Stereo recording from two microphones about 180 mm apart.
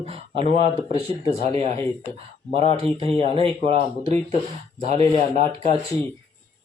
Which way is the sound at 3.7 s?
35° right (ahead or behind).